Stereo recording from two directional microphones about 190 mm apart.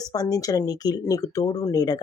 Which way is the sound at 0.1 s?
20° left (ahead or behind).